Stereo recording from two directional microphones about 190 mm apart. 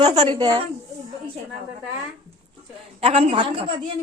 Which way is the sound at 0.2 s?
25° right (ahead or behind).